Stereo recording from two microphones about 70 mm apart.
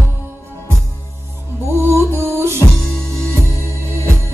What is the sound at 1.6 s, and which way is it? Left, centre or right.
Music, right.